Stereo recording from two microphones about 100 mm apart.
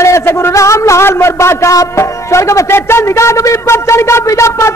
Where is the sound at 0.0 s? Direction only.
30° left (ahead or behind).